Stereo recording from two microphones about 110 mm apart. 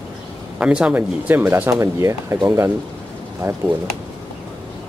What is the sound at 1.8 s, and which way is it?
Speech, 30° right (ahead or behind).